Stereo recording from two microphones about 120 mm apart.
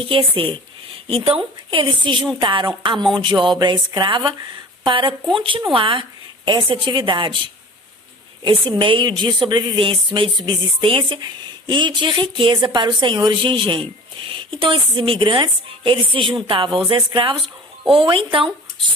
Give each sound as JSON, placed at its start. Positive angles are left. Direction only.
{"t": 0.0, "sound": "speech", "side_deg": -45}
{"t": 8.8, "sound": "speech", "side_deg": -45}